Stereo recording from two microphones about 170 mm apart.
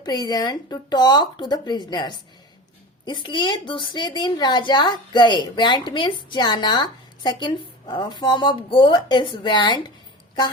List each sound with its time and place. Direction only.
0.0 s a woman's voice: 25° left (ahead or behind)